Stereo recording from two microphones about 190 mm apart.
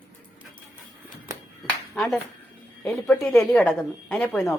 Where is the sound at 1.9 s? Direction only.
Centre (ahead or behind).